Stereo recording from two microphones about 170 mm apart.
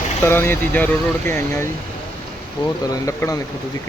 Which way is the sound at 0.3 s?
15° left (ahead or behind).